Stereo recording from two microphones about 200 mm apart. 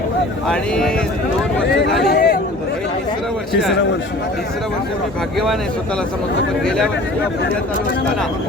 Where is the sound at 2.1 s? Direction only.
50° left (ahead or behind).